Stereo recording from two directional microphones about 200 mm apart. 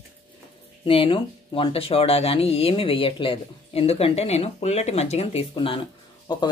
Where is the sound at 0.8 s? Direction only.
25° left (ahead or behind).